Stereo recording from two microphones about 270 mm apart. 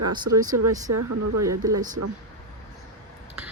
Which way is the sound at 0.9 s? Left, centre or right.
Right.